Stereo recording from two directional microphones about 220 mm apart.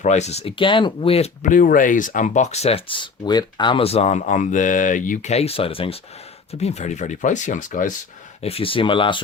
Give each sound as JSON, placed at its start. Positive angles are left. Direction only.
{"t": 0.0, "sound": "speech", "side_deg": 30}